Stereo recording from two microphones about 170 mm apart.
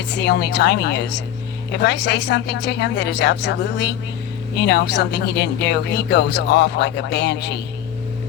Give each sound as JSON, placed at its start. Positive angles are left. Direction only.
{"t": 0.1, "sound": "speech", "side_deg": 85}